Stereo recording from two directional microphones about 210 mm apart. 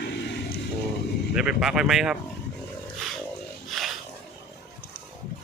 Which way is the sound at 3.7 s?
Centre (ahead or behind).